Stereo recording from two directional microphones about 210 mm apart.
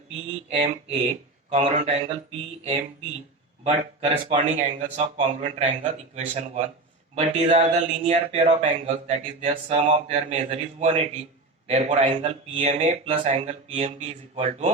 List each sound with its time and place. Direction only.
0.5 s speech: 30° right (ahead or behind)
3.6 s speech: 30° right (ahead or behind)